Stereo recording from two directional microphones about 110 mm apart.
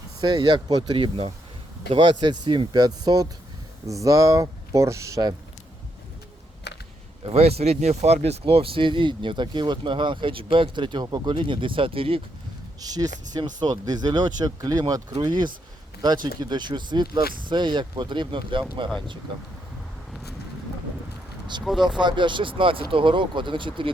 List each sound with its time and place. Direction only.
0.2 s speech: 40° right (ahead or behind)
7.3 s speech: 65° right (ahead or behind)
12.8 s speech: 35° right (ahead or behind)
21.6 s speech: 5° right (ahead or behind)
21.8 s speech: 45° right (ahead or behind)